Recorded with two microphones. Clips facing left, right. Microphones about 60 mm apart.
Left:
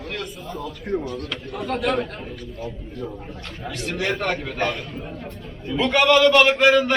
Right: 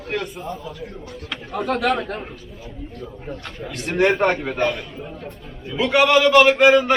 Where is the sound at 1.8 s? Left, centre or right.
Right.